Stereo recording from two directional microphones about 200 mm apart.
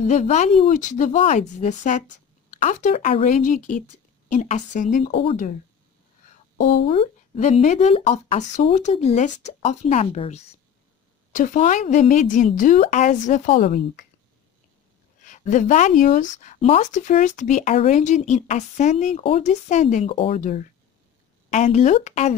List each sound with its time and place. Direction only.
0.0 s speech: 35° left (ahead or behind)
6.9 s speech: 30° left (ahead or behind)
15.2 s speech: 40° left (ahead or behind)
20.3 s speech: 40° left (ahead or behind)